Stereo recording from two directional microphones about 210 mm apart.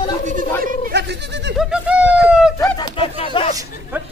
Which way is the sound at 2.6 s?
25° left (ahead or behind).